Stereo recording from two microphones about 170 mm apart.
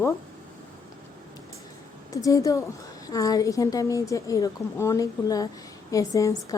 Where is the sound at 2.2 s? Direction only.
20° left (ahead or behind).